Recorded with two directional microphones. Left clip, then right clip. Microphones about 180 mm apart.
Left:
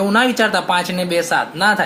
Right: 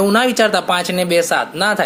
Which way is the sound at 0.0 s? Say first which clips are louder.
Right 1 dB; 45° right (ahead or behind).